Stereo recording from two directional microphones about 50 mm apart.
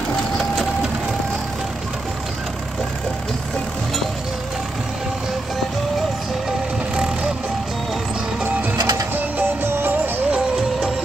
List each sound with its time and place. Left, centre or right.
8.5 s music: right
9.6 s music: right